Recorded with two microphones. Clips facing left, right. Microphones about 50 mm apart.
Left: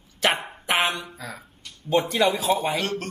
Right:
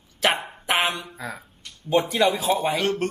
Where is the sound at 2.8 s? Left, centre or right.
Right.